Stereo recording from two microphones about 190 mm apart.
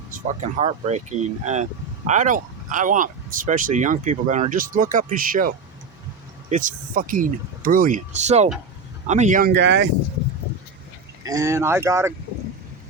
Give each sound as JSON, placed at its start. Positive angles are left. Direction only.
{"t": 0.1, "sound": "speech", "side_deg": -40}
{"t": 11.2, "sound": "speech", "side_deg": -15}